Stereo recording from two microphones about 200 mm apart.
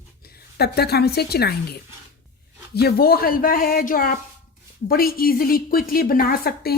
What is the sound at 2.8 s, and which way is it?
A woman's voice, 50° left (ahead or behind).